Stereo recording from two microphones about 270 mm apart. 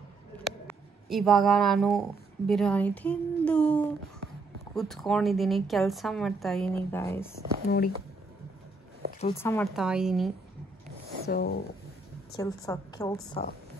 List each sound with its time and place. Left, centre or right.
0.7 s a woman's voice: centre
7.6 s speech: left
9.4 s a woman's voice: centre
11.2 s speech: left
12.4 s a woman's voice: centre